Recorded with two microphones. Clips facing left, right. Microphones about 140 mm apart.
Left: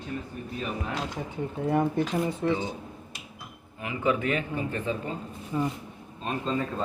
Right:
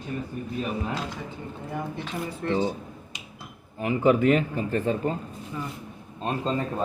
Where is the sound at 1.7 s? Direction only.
60° left (ahead or behind).